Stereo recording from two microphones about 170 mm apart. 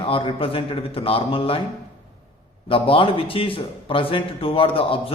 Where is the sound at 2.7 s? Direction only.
30° left (ahead or behind).